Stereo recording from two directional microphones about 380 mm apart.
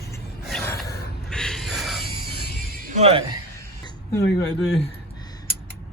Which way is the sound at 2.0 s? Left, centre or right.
Left.